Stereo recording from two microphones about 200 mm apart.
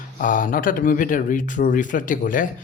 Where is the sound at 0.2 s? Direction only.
40° left (ahead or behind).